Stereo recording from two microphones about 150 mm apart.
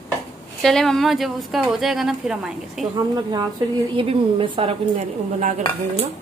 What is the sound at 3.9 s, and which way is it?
A woman's voice, 35° right (ahead or behind).